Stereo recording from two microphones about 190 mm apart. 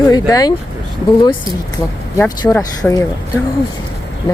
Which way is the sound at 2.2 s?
15° left (ahead or behind).